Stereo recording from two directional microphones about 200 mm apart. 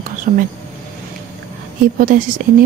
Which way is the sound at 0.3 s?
40° right (ahead or behind).